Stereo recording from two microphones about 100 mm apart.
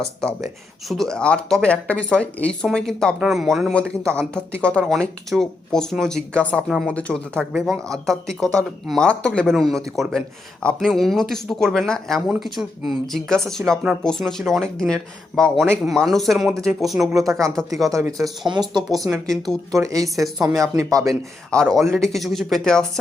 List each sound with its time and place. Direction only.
0.9 s speech: 5° left (ahead or behind)
3.7 s speech: 10° left (ahead or behind)
17.9 s speech: 35° right (ahead or behind)
18.4 s speech: 50° right (ahead or behind)
19.1 s speech: 5° left (ahead or behind)
19.7 s speech: 35° right (ahead or behind)
21.5 s speech: 5° left (ahead or behind)